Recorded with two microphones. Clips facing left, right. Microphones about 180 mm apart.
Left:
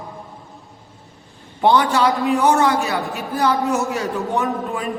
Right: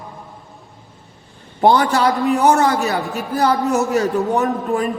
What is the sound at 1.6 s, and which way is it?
A man's voice, 40° right (ahead or behind).